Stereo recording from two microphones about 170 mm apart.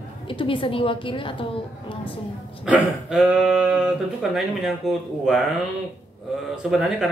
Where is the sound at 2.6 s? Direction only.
5° right (ahead or behind).